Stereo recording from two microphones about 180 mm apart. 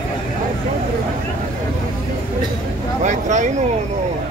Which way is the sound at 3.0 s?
40° right (ahead or behind).